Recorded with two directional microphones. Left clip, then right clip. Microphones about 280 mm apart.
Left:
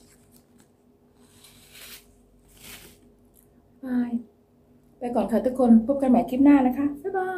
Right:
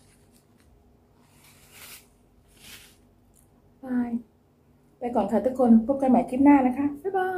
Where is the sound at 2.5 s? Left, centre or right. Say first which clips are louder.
Left 2 dB; left.